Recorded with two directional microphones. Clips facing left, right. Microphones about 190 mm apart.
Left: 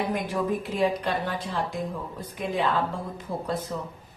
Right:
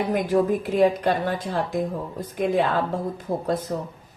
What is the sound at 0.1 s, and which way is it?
Speech, 45° right (ahead or behind).